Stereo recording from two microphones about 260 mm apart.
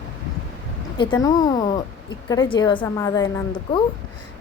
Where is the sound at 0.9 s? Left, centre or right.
Centre.